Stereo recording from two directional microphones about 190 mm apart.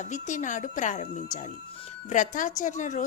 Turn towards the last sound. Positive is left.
turn(degrees=40)  # may be behind; listen again after turning